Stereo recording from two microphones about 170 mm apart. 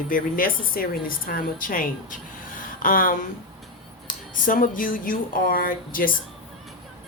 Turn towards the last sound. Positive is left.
turn(degrees=55)  # may be behind; listen again after turning